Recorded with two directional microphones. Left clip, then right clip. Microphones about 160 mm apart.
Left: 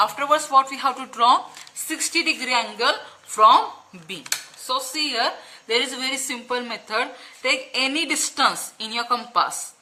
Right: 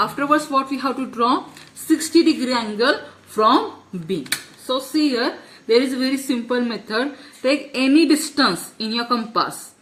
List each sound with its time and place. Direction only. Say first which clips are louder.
0.0 s speech: right 1 dB; 40° left (ahead or behind)